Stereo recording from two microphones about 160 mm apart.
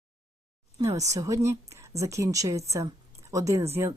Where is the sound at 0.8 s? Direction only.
20° right (ahead or behind).